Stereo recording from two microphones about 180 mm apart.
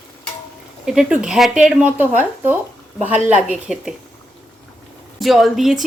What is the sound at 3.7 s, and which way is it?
Speech, centre (ahead or behind).